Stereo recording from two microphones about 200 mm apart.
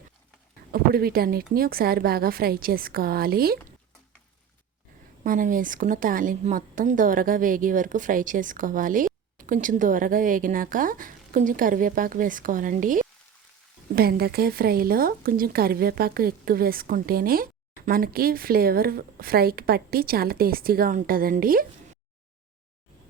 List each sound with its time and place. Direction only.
0.7 s speech: 50° right (ahead or behind)
5.2 s speech: 45° right (ahead or behind)